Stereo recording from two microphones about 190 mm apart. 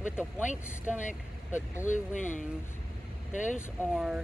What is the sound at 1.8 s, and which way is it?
Speech, 40° left (ahead or behind).